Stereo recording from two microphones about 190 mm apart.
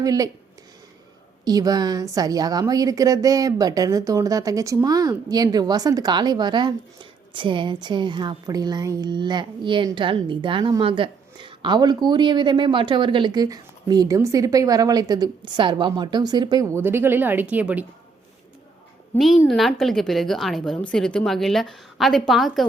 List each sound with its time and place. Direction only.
0.0 s a woman's voice: 20° right (ahead or behind)
1.5 s a woman's voice: 20° right (ahead or behind)
19.1 s a woman's voice: centre (ahead or behind)